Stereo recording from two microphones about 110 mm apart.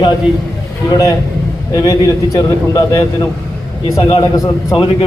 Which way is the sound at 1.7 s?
35° left (ahead or behind).